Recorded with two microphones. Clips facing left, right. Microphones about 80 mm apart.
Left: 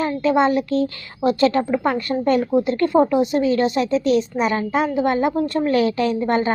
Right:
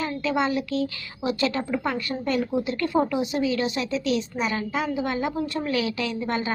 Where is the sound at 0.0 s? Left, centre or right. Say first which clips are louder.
Left 7 dB; left.